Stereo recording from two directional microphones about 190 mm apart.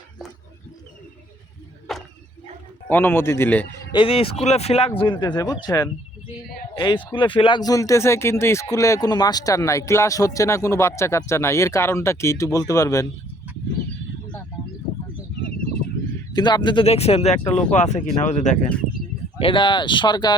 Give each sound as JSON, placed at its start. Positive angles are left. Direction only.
{"t": 1.9, "sound": "a sound", "side_deg": 0}
{"t": 2.9, "sound": "speech", "side_deg": 10}
{"t": 3.9, "sound": "speech", "side_deg": 30}
{"t": 16.3, "sound": "speech", "side_deg": 20}
{"t": 19.4, "sound": "speech", "side_deg": 25}